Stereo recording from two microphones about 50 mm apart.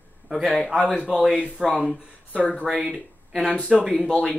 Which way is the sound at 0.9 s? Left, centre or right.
Centre.